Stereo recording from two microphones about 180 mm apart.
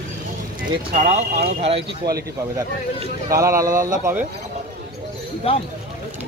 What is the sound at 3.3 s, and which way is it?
Speech, 15° right (ahead or behind).